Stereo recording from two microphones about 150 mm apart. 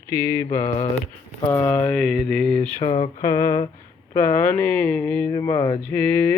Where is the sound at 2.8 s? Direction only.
35° left (ahead or behind).